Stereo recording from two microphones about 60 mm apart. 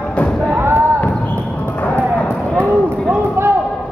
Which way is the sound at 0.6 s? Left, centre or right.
Right.